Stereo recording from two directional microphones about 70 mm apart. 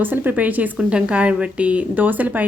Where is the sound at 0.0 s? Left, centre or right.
Right.